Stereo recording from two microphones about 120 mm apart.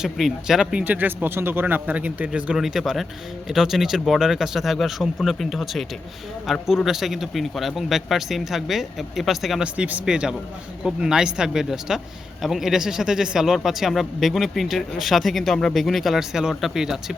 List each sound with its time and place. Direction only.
0.0 s speech: centre (ahead or behind)